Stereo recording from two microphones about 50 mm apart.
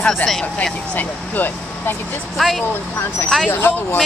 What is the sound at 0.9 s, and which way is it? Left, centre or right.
Speech, left.